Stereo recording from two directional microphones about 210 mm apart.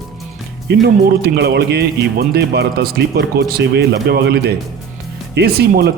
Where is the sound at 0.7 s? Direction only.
55° right (ahead or behind).